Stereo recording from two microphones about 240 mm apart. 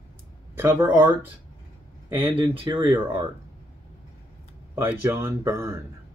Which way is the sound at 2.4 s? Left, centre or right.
Right.